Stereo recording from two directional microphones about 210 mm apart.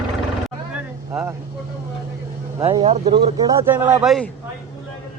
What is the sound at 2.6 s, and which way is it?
Speech, 30° right (ahead or behind).